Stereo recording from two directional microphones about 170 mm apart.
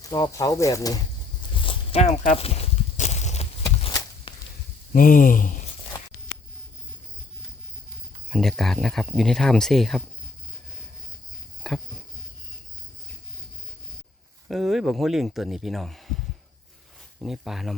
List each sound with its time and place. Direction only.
0.0 s speech: 20° left (ahead or behind)
1.6 s walk: 35° left (ahead or behind)
4.3 s whip: 30° left (ahead or behind)
4.9 s speech: 55° left (ahead or behind)
8.3 s speech: centre (ahead or behind)
11.6 s a sound: 5° left (ahead or behind)
14.4 s speech: centre (ahead or behind)